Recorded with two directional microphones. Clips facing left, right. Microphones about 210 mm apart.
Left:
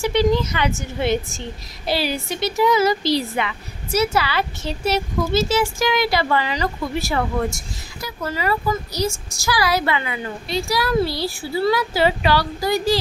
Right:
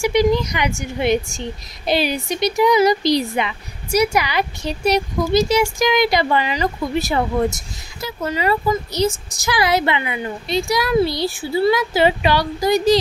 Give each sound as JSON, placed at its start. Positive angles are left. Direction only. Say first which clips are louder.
{"t": 0.0, "sound": "a woman's voice", "louder": "right 2 dB", "side_deg": -15}